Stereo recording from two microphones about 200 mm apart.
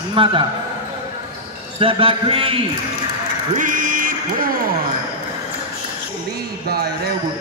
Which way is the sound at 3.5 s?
40° right (ahead or behind).